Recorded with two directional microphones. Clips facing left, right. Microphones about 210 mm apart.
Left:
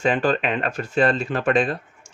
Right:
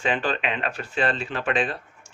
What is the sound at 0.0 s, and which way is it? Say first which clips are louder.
Speech: left 5 dB; 45° left (ahead or behind).